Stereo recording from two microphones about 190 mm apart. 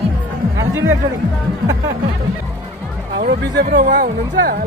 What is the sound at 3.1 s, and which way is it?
Speech, 55° right (ahead or behind).